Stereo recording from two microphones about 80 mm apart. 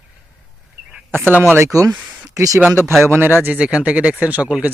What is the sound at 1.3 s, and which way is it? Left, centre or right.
Speech, left.